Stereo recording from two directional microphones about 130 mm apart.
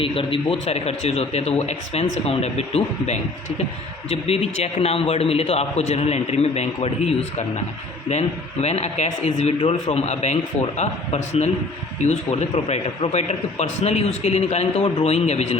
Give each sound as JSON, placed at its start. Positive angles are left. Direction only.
{"t": 0.0, "sound": "a man's voice", "side_deg": 45}
{"t": 8.6, "sound": "a man's voice", "side_deg": 55}